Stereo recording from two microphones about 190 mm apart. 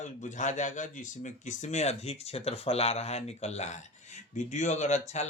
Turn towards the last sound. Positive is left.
turn(degrees=35)  # may be behind; listen again after turning